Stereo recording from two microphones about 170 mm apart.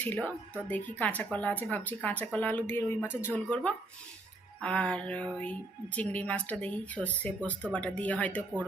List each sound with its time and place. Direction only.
0.0 s speech: 10° left (ahead or behind)